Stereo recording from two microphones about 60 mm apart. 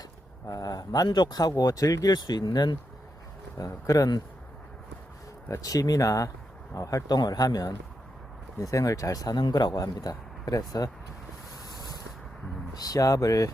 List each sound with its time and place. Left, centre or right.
0.4 s a man's voice: left
3.6 s speech: left
5.5 s a man's voice: left
8.6 s a man's voice: left
12.7 s speech: left